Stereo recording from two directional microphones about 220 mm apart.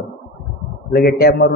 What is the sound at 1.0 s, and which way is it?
Speech, 45° left (ahead or behind).